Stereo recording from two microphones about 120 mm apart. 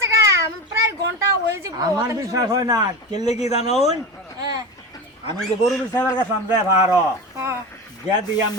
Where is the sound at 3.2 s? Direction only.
65° left (ahead or behind).